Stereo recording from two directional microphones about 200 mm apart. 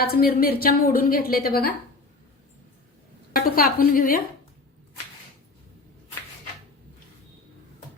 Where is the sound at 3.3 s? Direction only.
45° left (ahead or behind).